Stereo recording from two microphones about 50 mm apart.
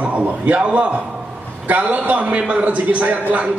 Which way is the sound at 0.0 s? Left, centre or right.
Right.